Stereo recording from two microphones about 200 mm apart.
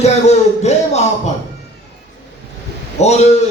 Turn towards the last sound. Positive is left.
turn(degrees=35)  # may be behind; listen again after turning